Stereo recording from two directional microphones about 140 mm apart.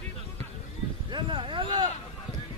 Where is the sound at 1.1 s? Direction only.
35° right (ahead or behind).